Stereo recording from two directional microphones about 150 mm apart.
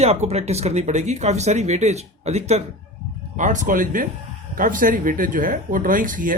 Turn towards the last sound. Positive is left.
turn(degrees=-65)  # may be behind; listen again after turning